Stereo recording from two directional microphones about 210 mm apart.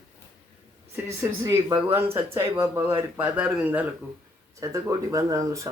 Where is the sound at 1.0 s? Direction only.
15° right (ahead or behind).